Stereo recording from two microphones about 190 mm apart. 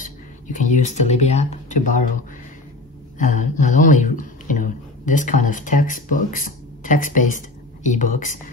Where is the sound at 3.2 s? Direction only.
40° left (ahead or behind).